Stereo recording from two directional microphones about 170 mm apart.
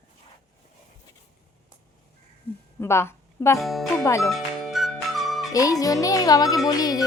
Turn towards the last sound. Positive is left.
turn(degrees=20)  # may be behind; listen again after turning